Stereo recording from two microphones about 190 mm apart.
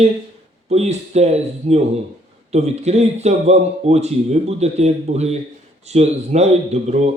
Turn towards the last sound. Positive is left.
turn(degrees=-35)  # may be behind; listen again after turning